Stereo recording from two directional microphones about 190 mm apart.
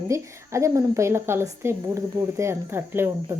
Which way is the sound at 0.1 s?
15° right (ahead or behind).